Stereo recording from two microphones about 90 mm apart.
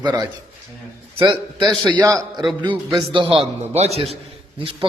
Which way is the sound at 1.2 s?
60° right (ahead or behind).